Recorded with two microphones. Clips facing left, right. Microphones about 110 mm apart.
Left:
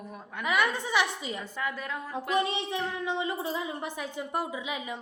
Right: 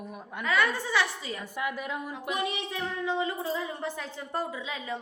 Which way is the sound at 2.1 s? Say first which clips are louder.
Left 7 dB; 30° left (ahead or behind).